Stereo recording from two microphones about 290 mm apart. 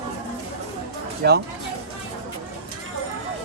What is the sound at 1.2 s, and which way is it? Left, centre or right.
Speech, right.